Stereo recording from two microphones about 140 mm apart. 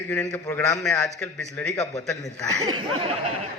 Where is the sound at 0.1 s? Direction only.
15° left (ahead or behind).